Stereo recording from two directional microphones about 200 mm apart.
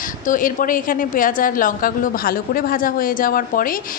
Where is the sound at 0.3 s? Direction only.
45° left (ahead or behind).